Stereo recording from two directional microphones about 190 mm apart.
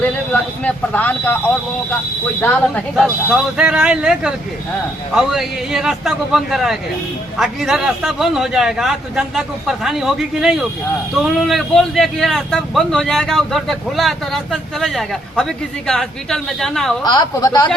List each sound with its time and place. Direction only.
0.6 s a man's voice: 10° left (ahead or behind)
17.0 s speech: 20° left (ahead or behind)